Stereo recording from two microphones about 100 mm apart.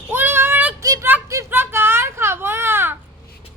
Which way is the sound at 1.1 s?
15° right (ahead or behind).